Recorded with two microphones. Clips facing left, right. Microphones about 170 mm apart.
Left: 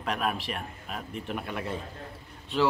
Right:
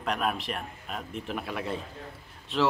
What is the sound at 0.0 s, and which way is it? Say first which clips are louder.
A man's voice: right 1 dB; centre (ahead or behind).